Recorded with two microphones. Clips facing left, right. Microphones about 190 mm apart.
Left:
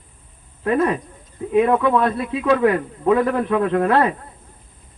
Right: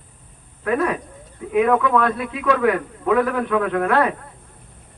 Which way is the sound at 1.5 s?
30° left (ahead or behind).